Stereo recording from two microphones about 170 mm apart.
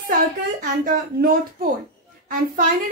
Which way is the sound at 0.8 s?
55° right (ahead or behind).